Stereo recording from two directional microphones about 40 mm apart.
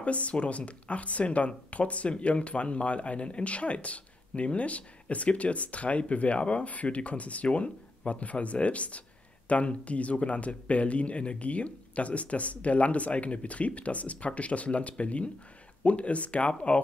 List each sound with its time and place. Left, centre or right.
0.0 s speech: left